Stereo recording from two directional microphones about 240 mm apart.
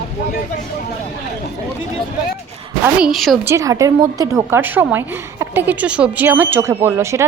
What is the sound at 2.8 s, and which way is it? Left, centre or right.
A woman's voice, centre.